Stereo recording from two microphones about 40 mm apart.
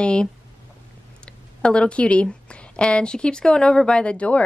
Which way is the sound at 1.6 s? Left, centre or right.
Left.